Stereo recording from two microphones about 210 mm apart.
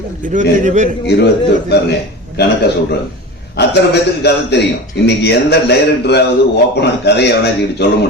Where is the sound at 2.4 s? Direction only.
50° left (ahead or behind).